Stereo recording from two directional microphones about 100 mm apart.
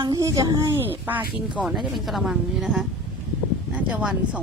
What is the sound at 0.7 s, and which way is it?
Speech, 20° right (ahead or behind).